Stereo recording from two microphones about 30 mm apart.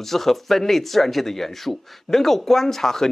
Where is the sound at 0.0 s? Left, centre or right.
Centre.